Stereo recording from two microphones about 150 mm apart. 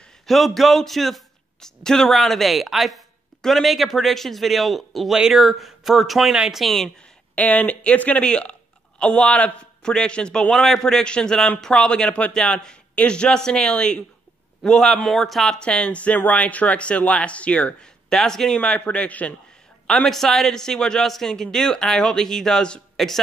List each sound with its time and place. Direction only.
0.3 s a man's voice: centre (ahead or behind)